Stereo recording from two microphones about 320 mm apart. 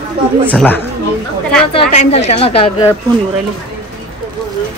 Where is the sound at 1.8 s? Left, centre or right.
Centre.